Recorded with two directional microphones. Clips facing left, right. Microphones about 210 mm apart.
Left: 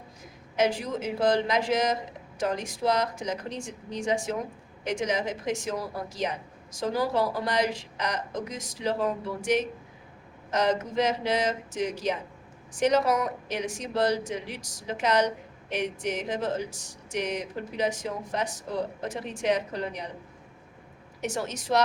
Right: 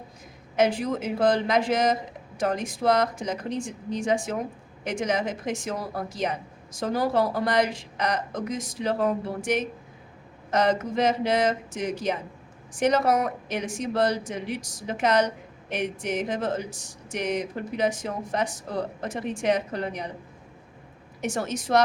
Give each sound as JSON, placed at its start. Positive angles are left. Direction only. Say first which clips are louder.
{"t": 0.5, "sound": "a woman's voice", "louder": "right 3 dB", "side_deg": -55}
{"t": 21.2, "sound": "a woman's voice", "louder": "right 3 dB", "side_deg": -50}